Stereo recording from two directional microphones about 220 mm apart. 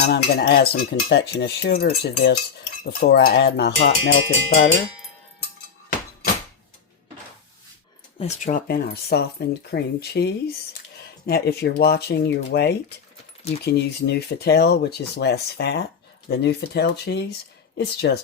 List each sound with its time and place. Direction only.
0.0 s cutlery: 45° left (ahead or behind)
8.2 s speech: 30° left (ahead or behind)
8.6 s cutlery: 45° left (ahead or behind)